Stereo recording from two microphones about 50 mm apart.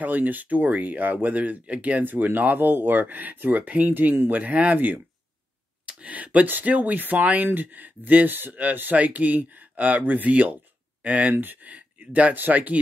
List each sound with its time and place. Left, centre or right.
0.0 s speech: right
2.0 s speech: right
11.3 s speech: right